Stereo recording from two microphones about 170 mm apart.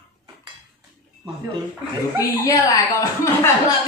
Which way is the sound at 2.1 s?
20° left (ahead or behind).